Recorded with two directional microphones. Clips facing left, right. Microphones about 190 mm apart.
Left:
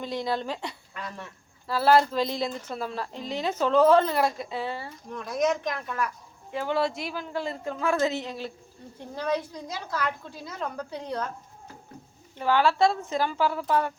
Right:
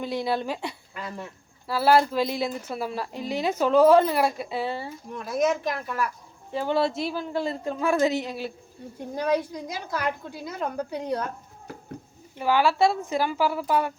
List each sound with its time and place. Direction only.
0.0 s a woman's voice: 10° right (ahead or behind)
5.1 s speech: 5° right (ahead or behind)
6.7 s a woman's voice: 30° right (ahead or behind); by 11.3 s 10° right (ahead or behind)
12.4 s a woman's voice: 10° right (ahead or behind)